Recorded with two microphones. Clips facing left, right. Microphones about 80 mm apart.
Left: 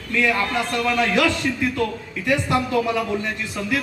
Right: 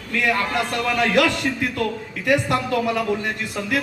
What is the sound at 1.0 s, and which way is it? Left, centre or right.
Speech, right.